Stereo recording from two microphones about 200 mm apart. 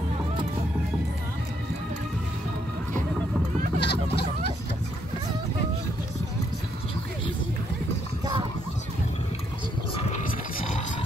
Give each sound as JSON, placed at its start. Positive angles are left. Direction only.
{"t": 3.8, "sound": "vehicle", "side_deg": 55}